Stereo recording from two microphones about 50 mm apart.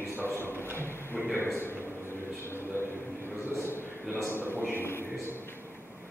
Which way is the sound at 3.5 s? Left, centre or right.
Left.